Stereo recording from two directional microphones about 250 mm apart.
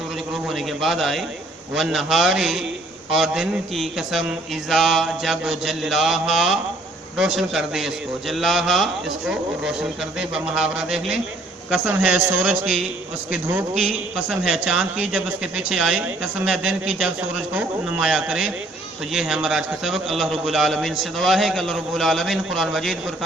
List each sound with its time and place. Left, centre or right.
0.4 s a man's voice: centre